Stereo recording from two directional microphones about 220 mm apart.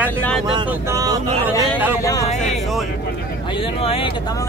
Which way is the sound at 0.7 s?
15° right (ahead or behind).